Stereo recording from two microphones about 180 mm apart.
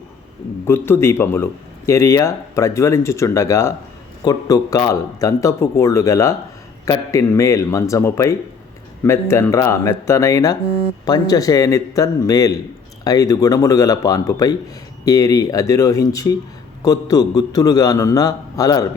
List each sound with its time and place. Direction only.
0.6 s a man's voice: 15° left (ahead or behind)